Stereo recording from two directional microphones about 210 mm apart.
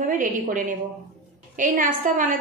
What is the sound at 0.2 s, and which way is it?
A woman's voice, 40° right (ahead or behind).